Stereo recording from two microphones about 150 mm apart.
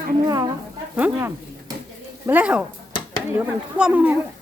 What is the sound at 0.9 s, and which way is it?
A man's voice, 10° right (ahead or behind).